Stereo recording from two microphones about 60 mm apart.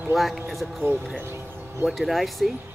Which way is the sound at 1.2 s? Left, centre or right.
Right.